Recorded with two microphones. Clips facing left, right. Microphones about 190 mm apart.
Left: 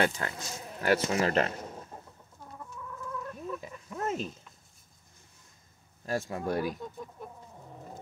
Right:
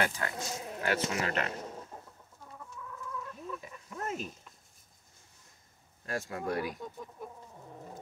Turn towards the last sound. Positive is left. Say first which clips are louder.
# left 4 dB
turn(degrees=25)  # may be behind; listen again after turning